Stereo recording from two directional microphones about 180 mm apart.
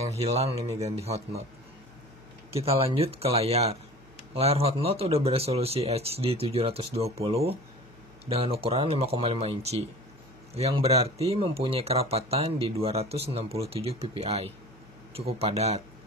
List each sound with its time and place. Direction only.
0.0 s speech: 35° right (ahead or behind)
2.5 s speech: 30° right (ahead or behind)